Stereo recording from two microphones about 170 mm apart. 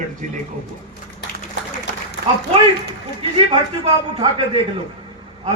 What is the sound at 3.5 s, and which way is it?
Speech, 30° right (ahead or behind).